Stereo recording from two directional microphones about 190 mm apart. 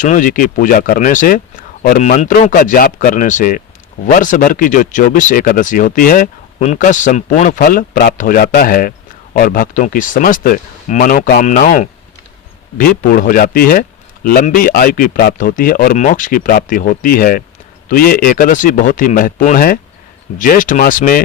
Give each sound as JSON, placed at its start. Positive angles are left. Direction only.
{"t": 0.0, "sound": "speech", "side_deg": 45}
{"t": 11.4, "sound": "speech", "side_deg": 40}